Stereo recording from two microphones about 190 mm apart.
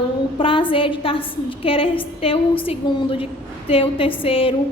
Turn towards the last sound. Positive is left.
turn(degrees=30)  # may be behind; listen again after turning